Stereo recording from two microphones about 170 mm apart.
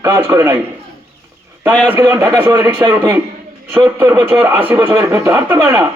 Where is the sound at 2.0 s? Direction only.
20° right (ahead or behind).